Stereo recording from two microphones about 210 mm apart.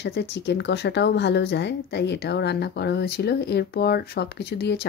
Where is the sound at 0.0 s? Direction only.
55° left (ahead or behind).